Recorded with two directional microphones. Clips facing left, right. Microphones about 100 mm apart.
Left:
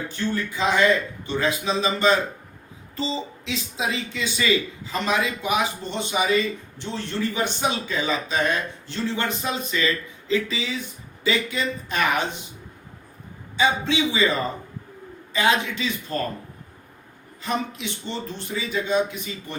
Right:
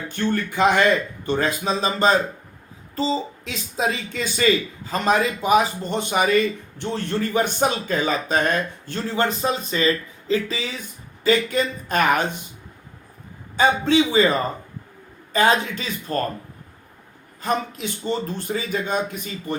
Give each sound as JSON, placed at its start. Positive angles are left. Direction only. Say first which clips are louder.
{"t": 0.1, "sound": "speech", "louder": "right 6 dB", "side_deg": -60}
{"t": 13.6, "sound": "speech", "louder": "right 4 dB", "side_deg": -45}
{"t": 17.4, "sound": "speech", "louder": "right 3 dB", "side_deg": -45}